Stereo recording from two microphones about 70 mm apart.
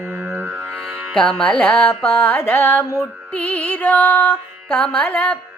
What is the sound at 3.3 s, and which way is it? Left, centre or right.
Music, left.